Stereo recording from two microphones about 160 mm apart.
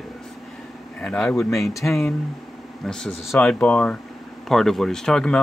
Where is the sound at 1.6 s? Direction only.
20° left (ahead or behind).